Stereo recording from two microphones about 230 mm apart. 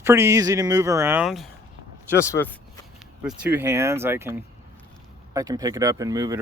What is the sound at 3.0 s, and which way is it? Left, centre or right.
Speech, centre.